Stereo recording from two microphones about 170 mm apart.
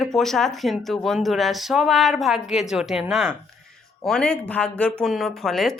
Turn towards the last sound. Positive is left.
turn(degrees=0)  # may be behind; listen again after turning